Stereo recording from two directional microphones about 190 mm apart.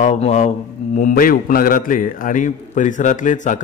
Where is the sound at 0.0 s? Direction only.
35° left (ahead or behind).